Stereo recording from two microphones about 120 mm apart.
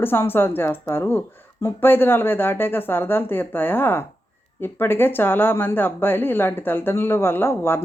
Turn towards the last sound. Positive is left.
turn(degrees=20)  # may be behind; listen again after turning